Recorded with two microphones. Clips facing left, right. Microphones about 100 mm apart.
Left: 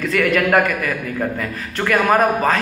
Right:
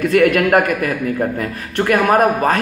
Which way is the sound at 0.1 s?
50° right (ahead or behind).